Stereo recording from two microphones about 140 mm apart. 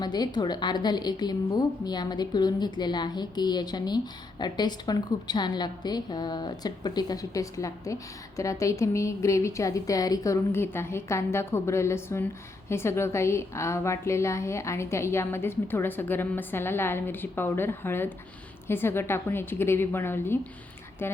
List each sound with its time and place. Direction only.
0.0 s a woman's voice: 30° left (ahead or behind)